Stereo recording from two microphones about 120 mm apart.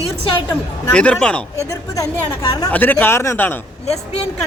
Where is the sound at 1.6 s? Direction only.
30° left (ahead or behind).